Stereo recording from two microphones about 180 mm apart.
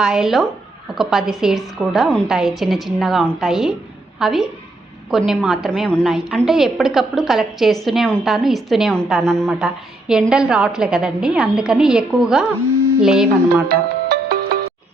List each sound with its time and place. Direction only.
0.0 s a woman's voice: 5° right (ahead or behind)
13.7 s music: 60° right (ahead or behind)